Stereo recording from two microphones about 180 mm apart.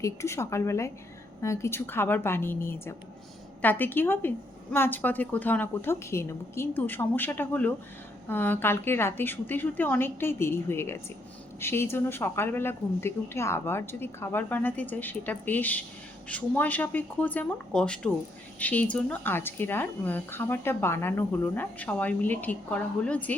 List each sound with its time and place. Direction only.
0.0 s a woman's voice: 15° left (ahead or behind)